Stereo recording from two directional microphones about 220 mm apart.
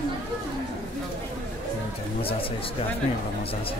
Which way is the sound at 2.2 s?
25° left (ahead or behind).